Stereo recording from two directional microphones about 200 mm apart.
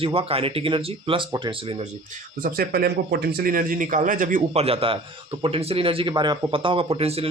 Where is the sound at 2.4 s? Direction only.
50° right (ahead or behind).